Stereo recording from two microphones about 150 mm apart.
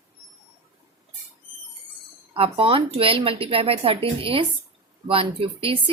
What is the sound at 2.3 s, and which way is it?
Speech, 35° right (ahead or behind).